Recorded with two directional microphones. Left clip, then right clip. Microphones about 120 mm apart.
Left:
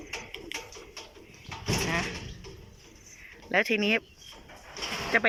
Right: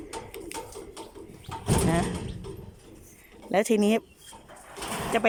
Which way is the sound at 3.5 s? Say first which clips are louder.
Right 2 dB; 40° right (ahead or behind).